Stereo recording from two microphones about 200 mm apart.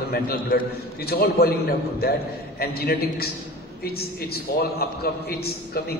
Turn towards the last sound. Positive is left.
turn(degrees=50)  # may be behind; listen again after turning